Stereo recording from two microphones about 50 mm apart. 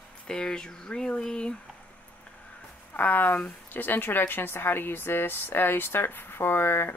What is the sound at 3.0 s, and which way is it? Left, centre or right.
Speech, left.